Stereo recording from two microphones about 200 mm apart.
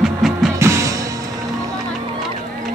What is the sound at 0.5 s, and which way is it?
Music, 15° right (ahead or behind).